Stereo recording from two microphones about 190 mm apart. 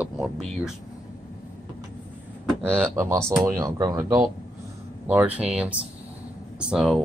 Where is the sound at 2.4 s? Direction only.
10° right (ahead or behind).